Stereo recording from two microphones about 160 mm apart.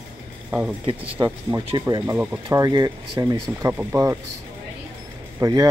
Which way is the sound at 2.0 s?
10° right (ahead or behind).